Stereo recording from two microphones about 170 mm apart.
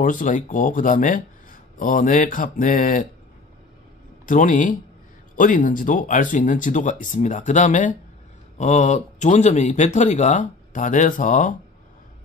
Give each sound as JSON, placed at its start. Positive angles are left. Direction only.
{"t": 0.0, "sound": "speech", "side_deg": 50}
{"t": 4.3, "sound": "speech", "side_deg": 50}